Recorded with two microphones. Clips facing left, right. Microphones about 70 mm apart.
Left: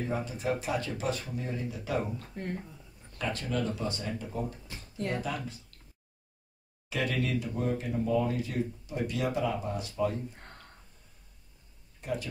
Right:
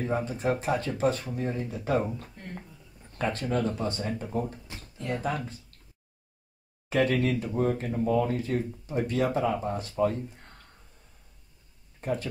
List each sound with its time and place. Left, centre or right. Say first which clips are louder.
0.0 s speech: right 4 dB; right
6.9 s speech: right 6 dB; right
12.0 s speech: right 4 dB; right